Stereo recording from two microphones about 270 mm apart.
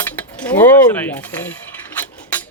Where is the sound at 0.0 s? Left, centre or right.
Centre.